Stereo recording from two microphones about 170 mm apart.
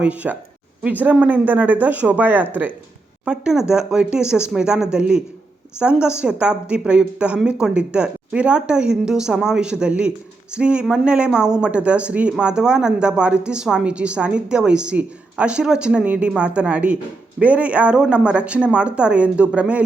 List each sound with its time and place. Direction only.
0.0 s a woman's voice: 10° right (ahead or behind)